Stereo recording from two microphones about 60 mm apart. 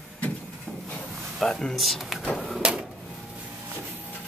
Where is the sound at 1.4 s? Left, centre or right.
Centre.